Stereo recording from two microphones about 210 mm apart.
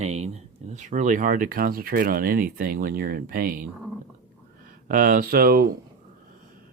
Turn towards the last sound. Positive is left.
turn(degrees=-45)  # may be behind; listen again after turning